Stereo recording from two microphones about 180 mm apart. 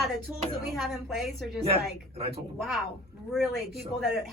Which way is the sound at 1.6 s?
35° right (ahead or behind).